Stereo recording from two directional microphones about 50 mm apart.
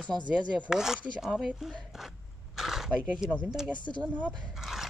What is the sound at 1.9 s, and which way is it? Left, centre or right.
Throat clearing, centre.